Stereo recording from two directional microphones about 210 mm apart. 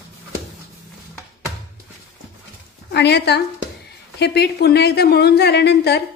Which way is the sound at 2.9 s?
55° left (ahead or behind).